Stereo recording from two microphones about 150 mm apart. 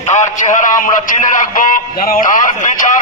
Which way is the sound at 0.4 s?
60° left (ahead or behind).